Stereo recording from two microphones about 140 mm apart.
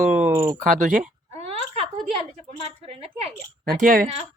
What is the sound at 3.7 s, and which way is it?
Speech, 85° right.